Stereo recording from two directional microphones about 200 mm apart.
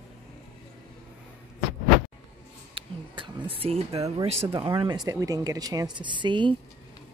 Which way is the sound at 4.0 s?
30° right (ahead or behind).